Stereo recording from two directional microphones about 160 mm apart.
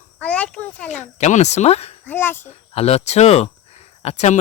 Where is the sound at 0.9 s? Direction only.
45° left (ahead or behind).